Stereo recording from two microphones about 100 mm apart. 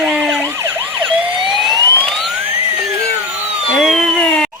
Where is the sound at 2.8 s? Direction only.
35° right (ahead or behind).